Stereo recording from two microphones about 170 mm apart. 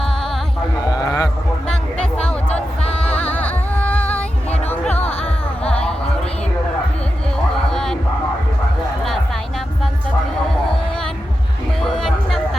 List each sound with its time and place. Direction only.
0.9 s a sound: 20° left (ahead or behind)
1.6 s music: 5° left (ahead or behind)
4.9 s music: 35° left (ahead or behind)
5.6 s music: 5° left (ahead or behind)
7.3 s music: 5° left (ahead or behind)
10.5 s a sound: 5° left (ahead or behind)
11.9 s music: centre (ahead or behind)